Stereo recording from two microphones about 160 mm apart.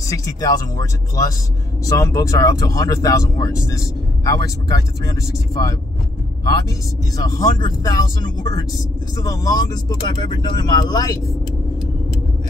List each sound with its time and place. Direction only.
0.0 s speech: 20° left (ahead or behind)
7.2 s speech: 20° left (ahead or behind)